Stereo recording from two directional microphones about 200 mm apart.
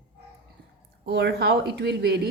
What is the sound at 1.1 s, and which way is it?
Speech, 60° right (ahead or behind).